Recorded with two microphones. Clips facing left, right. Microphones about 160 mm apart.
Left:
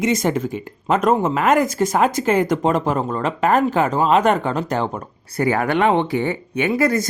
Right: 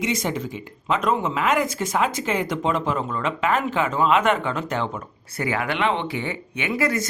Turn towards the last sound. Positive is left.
turn(degrees=40)  # may be behind; listen again after turning